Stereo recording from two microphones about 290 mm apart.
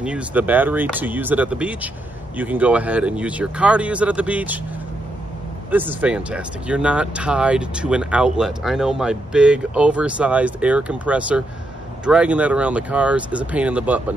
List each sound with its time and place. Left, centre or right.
0.0 s speech: centre
5.7 s speech: centre